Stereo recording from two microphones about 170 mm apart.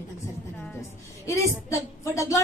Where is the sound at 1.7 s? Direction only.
15° left (ahead or behind).